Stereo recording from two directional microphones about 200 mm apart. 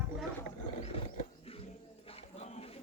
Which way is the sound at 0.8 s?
30° left (ahead or behind).